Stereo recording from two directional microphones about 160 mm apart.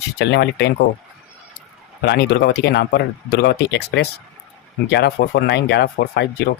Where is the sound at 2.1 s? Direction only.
90° left.